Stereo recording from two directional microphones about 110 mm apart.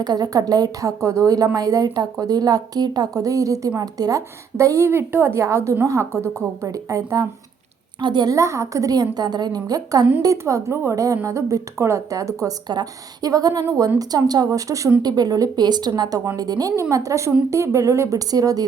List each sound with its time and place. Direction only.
0.0 s a woman's voice: 35° right (ahead or behind)
8.4 s a woman's voice: 25° right (ahead or behind)